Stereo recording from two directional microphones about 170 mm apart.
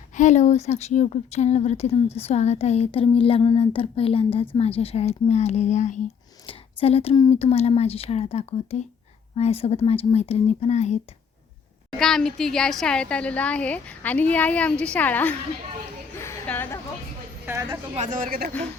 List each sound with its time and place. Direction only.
0.2 s speech: 45° left (ahead or behind)
11.9 s a woman's voice: 5° left (ahead or behind)
16.1 s a sound: 15° left (ahead or behind)
17.4 s a woman's voice: 15° right (ahead or behind)
17.9 s speech: 45° right (ahead or behind)